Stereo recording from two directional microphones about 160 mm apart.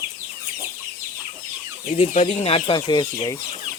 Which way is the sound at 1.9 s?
45° left (ahead or behind).